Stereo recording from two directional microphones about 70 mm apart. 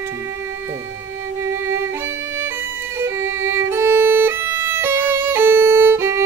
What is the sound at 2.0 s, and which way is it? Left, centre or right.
Violin, right.